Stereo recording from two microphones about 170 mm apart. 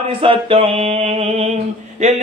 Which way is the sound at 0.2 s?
30° right (ahead or behind).